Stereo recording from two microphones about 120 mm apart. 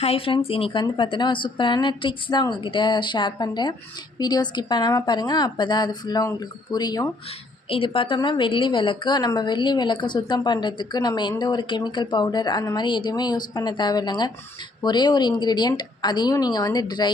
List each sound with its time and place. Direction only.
0.0 s a woman's voice: 55° left (ahead or behind); by 7.1 s 35° left (ahead or behind)
7.7 s a woman's voice: 45° left (ahead or behind)